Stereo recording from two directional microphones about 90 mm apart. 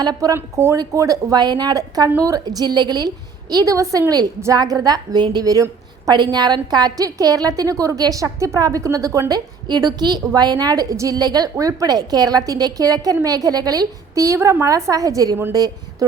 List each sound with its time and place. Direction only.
0.0 s a woman's voice: 45° right (ahead or behind)
0.3 s a woman's voice: 30° right (ahead or behind)
9.3 s a woman's voice: 50° right (ahead or behind)